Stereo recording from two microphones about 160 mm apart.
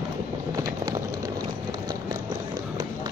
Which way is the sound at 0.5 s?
20° right (ahead or behind).